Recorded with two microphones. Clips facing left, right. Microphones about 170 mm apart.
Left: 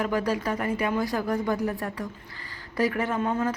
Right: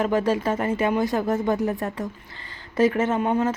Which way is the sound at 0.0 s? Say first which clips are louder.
Right 4 dB; 25° right (ahead or behind).